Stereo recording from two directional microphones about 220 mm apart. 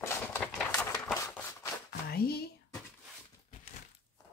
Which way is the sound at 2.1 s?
45° left (ahead or behind).